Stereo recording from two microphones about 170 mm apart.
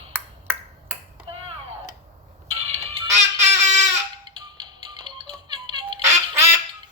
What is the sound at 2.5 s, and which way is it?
Ringtone, 35° right (ahead or behind).